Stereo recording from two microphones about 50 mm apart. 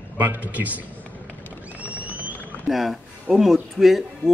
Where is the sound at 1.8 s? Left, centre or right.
Right.